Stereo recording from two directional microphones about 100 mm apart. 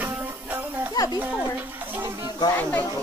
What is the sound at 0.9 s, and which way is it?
Children playing, 40° left (ahead or behind).